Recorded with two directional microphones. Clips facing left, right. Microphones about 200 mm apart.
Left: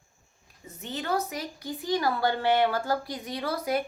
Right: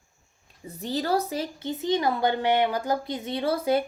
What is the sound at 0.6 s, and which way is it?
A woman's voice, 35° right (ahead or behind).